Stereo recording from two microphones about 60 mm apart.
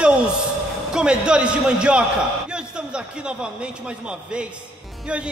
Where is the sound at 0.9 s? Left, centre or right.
Centre.